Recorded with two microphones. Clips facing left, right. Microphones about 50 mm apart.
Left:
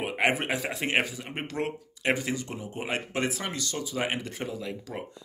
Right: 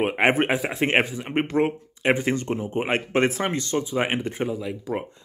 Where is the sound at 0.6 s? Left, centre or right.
Centre.